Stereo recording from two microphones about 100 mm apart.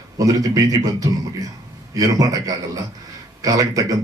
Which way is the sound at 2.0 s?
35° right (ahead or behind).